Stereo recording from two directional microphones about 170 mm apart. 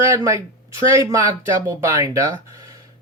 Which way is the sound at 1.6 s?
20° right (ahead or behind).